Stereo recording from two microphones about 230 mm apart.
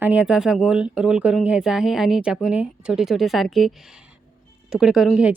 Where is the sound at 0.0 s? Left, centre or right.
Centre.